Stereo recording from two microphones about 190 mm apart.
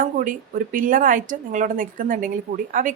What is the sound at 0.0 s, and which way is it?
Speech, 45° right (ahead or behind).